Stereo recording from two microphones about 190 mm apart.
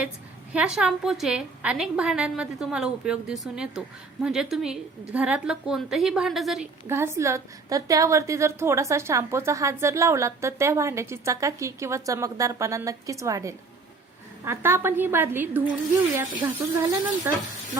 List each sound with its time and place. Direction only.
0.5 s a woman's voice: 5° right (ahead or behind)
6.8 s a woman's voice: 15° right (ahead or behind)
17.3 s a woman's voice: 10° right (ahead or behind)